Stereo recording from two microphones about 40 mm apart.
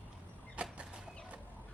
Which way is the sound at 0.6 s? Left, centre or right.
Right.